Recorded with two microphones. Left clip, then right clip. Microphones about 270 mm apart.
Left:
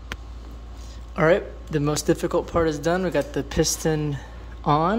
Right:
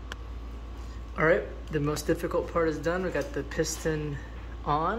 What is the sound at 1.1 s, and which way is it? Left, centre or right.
Speech, left.